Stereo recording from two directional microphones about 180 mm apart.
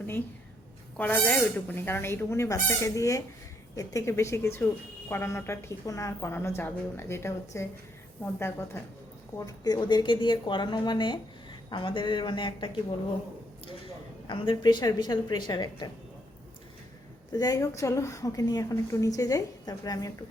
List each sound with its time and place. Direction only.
0.9 s a woman's voice: 10° left (ahead or behind); by 12.7 s 25° left (ahead or behind)
14.3 s a woman's voice: 30° left (ahead or behind)
17.3 s a woman's voice: 20° left (ahead or behind)